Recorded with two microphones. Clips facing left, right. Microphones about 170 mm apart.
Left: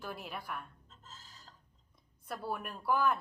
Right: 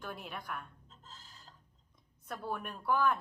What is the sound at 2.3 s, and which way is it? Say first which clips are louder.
Speech: even; 5° left (ahead or behind).